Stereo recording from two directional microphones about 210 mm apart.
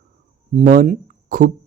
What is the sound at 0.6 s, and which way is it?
Speech, 40° right (ahead or behind).